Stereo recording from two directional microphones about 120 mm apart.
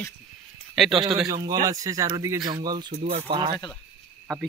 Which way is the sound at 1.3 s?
30° right (ahead or behind).